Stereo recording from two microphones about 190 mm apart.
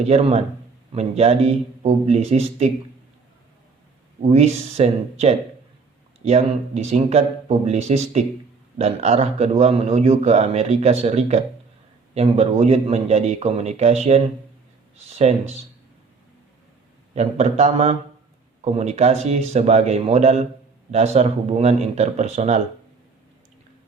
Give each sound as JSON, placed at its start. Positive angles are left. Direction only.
{"t": 0.0, "sound": "speech", "side_deg": -35}
{"t": 4.2, "sound": "speech", "side_deg": -35}
{"t": 17.2, "sound": "speech", "side_deg": -35}